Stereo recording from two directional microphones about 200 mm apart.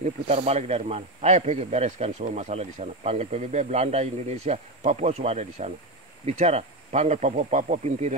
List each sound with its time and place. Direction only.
0.0 s speech: 30° right (ahead or behind)